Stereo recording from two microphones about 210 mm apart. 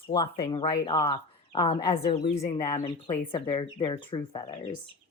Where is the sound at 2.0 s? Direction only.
30° left (ahead or behind).